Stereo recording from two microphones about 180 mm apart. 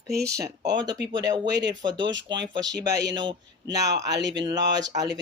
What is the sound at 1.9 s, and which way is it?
Speech, 90° right.